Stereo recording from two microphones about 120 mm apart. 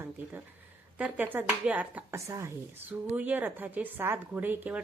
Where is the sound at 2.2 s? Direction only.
25° right (ahead or behind).